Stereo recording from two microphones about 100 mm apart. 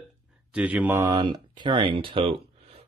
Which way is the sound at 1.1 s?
45° right (ahead or behind).